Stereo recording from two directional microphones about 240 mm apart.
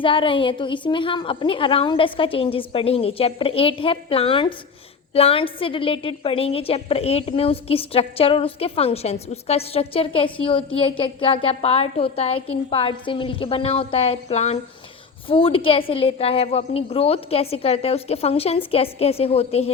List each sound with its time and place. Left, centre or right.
0.0 s a woman's voice: left